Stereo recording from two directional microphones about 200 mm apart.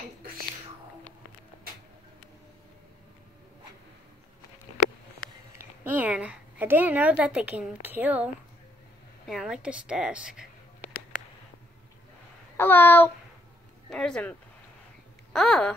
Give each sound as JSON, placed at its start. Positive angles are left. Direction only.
{"t": 5.6, "sound": "a woman's voice", "side_deg": -10}
{"t": 9.3, "sound": "a woman's voice", "side_deg": -5}
{"t": 12.5, "sound": "a sound", "side_deg": 10}
{"t": 13.8, "sound": "speech", "side_deg": 5}
{"t": 15.3, "sound": "a woman's voice", "side_deg": 5}